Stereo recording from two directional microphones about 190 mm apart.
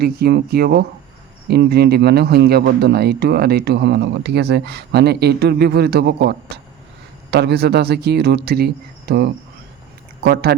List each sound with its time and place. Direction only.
0.0 s speech: 60° right (ahead or behind)